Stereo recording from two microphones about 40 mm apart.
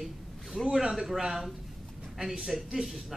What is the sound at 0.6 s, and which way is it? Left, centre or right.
Speech, centre.